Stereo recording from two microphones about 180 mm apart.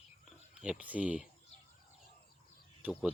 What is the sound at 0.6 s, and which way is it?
Speech, 5° right (ahead or behind).